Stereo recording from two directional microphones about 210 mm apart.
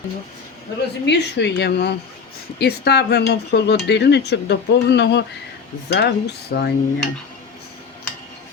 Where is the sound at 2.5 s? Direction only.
50° left (ahead or behind).